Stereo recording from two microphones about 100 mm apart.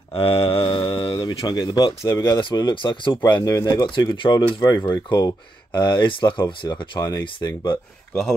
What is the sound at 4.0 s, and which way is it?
Speech, 50° left (ahead or behind).